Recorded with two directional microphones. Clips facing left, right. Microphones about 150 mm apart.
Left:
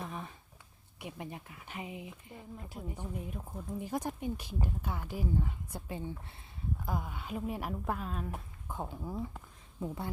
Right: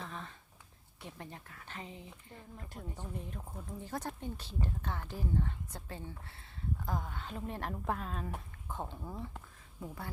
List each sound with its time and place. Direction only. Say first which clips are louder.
0.0 s a sound: left 3 dB; 15° left (ahead or behind)
0.9 s speech: left 5 dB; 15° left (ahead or behind)
9.8 s speech: left 6 dB; 20° left (ahead or behind)